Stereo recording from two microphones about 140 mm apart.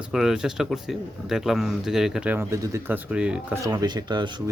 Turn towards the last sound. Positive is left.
turn(degrees=-30)  # may be behind; listen again after turning